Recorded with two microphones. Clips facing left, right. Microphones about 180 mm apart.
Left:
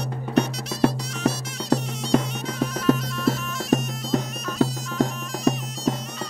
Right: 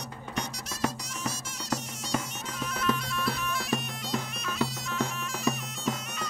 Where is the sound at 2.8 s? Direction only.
45° left (ahead or behind).